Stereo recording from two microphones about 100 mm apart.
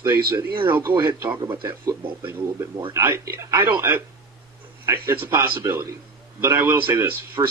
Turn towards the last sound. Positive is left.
turn(degrees=-25)  # may be behind; listen again after turning